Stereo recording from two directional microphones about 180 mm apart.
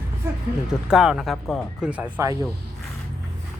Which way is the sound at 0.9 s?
Centre (ahead or behind).